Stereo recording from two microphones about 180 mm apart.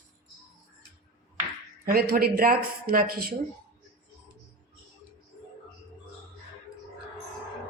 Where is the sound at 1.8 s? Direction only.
55° right (ahead or behind).